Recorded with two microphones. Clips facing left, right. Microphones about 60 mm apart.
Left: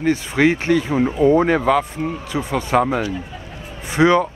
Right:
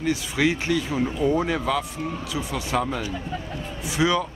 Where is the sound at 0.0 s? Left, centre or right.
Left.